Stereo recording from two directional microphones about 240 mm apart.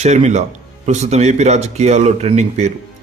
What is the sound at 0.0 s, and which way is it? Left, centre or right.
Speech, right.